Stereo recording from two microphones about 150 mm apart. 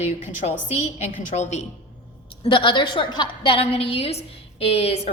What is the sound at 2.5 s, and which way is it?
A woman's voice, 35° left (ahead or behind).